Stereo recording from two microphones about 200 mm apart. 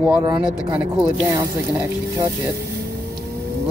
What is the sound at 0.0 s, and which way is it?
Speech, 15° right (ahead or behind).